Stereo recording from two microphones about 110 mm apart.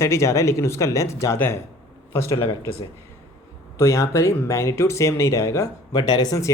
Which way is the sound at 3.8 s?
25° left (ahead or behind).